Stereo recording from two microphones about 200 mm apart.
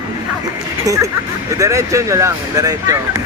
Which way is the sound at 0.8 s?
15° right (ahead or behind).